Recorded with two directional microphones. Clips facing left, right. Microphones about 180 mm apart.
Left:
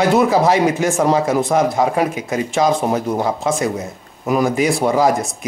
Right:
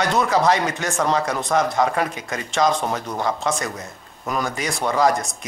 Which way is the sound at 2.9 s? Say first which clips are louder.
Left 7 dB; 20° left (ahead or behind).